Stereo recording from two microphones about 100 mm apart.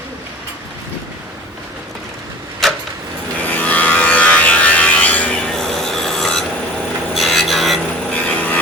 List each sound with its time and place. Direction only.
2.6 s vehicle: 5° left (ahead or behind)
3.4 s a sound: 15° left (ahead or behind)
7.1 s rub: centre (ahead or behind)
8.1 s vehicle: 15° left (ahead or behind)